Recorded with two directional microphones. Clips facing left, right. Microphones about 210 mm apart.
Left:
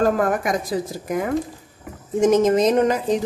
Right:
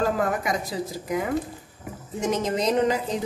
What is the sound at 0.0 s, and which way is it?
Speech, 50° left (ahead or behind).